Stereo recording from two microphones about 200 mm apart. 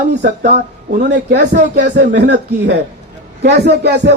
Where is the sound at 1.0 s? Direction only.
60° right (ahead or behind).